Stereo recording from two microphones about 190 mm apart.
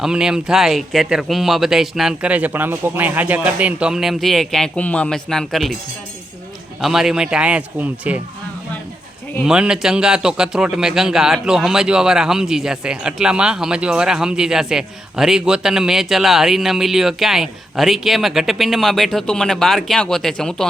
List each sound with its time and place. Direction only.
0.0 s a man's voice: 5° right (ahead or behind)
6.8 s a man's voice: centre (ahead or behind)
9.4 s a man's voice: 5° right (ahead or behind)